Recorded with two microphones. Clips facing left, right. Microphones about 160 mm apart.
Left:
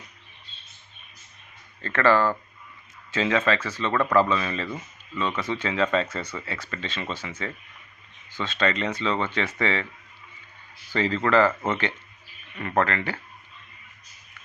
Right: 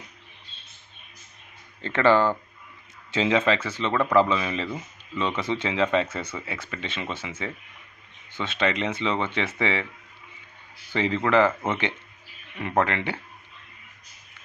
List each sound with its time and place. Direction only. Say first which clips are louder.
1.8 s speech: right 1 dB; 20° right (ahead or behind)
10.9 s speech: even; 15° right (ahead or behind)